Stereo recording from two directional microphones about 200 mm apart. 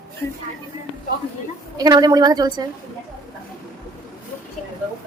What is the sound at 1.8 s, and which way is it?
Speech, 20° right (ahead or behind).